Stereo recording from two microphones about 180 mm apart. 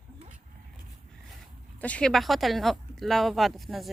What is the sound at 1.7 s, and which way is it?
A woman's voice, 5° left (ahead or behind).